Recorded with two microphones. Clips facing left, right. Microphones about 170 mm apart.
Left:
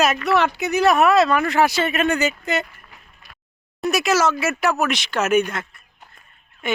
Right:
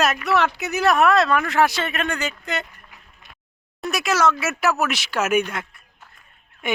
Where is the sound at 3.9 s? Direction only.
Centre (ahead or behind).